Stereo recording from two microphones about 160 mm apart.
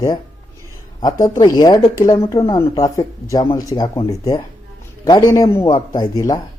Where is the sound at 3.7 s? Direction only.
25° left (ahead or behind).